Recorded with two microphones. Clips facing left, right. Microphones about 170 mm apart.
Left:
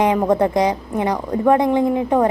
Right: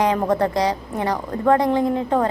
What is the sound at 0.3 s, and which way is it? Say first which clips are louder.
A woman's voice: left 3 dB; 20° left (ahead or behind).